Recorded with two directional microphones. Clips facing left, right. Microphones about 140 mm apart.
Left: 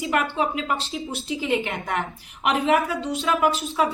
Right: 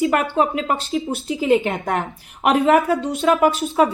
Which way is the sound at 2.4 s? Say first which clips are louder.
Right 6 dB; 55° right (ahead or behind).